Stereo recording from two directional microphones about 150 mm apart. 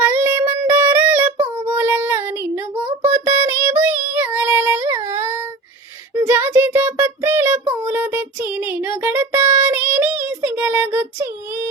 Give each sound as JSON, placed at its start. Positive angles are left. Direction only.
{"t": 0.0, "sound": "child singing", "side_deg": -15}
{"t": 2.8, "sound": "a sound", "side_deg": -40}
{"t": 3.4, "sound": "child singing", "side_deg": -15}
{"t": 7.7, "sound": "music", "side_deg": -10}